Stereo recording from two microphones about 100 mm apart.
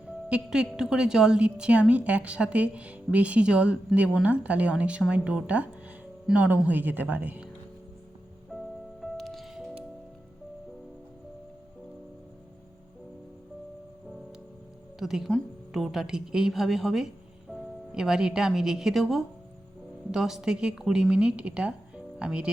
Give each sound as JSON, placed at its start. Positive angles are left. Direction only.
{"t": 0.3, "sound": "a woman's voice", "side_deg": -10}
{"t": 8.5, "sound": "music", "side_deg": 0}
{"t": 14.9, "sound": "a woman's voice", "side_deg": -5}